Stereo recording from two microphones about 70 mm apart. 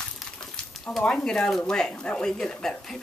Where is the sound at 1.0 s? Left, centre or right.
Centre.